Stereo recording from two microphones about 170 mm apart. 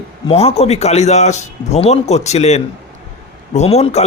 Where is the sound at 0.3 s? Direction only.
35° left (ahead or behind).